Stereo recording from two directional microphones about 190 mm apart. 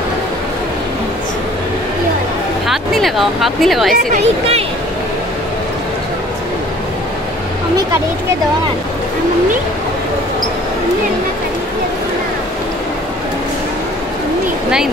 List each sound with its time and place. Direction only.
2.7 s speech: centre (ahead or behind)
3.9 s speech: 45° right (ahead or behind)